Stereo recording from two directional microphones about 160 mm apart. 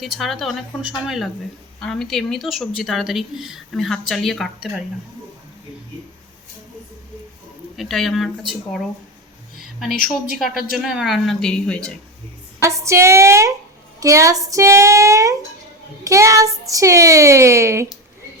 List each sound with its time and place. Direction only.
0.0 s a woman's voice: centre (ahead or behind)
7.8 s a woman's voice: centre (ahead or behind)
10.3 s a woman's voice: centre (ahead or behind)
12.6 s a woman's voice: 20° right (ahead or behind)